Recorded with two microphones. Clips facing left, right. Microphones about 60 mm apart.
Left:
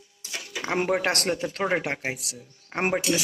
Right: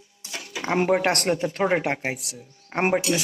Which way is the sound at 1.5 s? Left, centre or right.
Centre.